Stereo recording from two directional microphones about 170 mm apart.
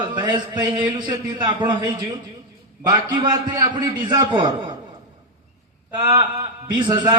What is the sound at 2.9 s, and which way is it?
A man's voice, 25° right (ahead or behind).